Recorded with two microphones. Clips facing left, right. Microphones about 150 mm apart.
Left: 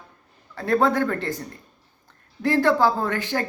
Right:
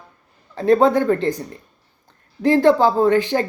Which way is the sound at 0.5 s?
20° right (ahead or behind).